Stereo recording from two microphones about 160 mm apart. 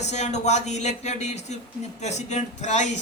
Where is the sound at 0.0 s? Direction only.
45° left (ahead or behind).